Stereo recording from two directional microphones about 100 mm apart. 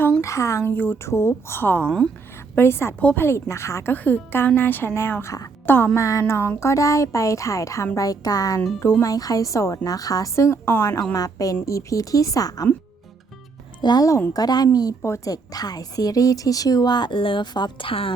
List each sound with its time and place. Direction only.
0.2 s a woman's voice: 30° left (ahead or behind)
0.7 s a woman's voice: 20° left (ahead or behind)
2.6 s a woman's voice: 25° left (ahead or behind)
3.0 s a woman's voice: 15° left (ahead or behind)
3.2 s a woman's voice: 30° left (ahead or behind)
3.9 s a woman's voice: 20° left (ahead or behind)
5.6 s a woman's voice: 20° left (ahead or behind); by 12.6 s 40° left (ahead or behind)
13.8 s a woman's voice: 40° left (ahead or behind); by 18.1 s 65° left (ahead or behind)